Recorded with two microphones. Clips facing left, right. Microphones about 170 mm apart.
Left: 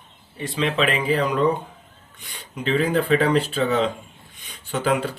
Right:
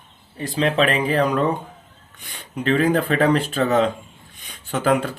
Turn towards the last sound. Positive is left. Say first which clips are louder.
# right 3 dB
turn(degrees=-45)  # may be behind; listen again after turning